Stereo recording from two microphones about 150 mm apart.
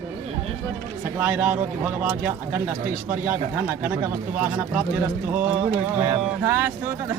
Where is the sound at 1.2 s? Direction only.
15° right (ahead or behind).